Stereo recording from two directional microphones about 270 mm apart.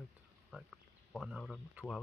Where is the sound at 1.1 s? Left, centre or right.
Centre.